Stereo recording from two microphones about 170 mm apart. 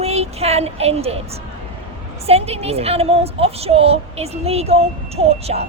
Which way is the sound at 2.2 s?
35° right (ahead or behind).